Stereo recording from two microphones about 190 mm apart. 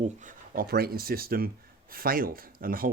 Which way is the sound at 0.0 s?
40° right (ahead or behind).